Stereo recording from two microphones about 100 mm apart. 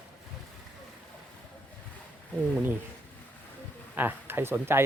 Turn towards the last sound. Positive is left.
turn(degrees=-25)  # may be behind; listen again after turning